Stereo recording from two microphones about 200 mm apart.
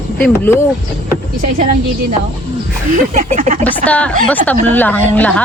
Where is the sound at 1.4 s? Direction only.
40° right (ahead or behind).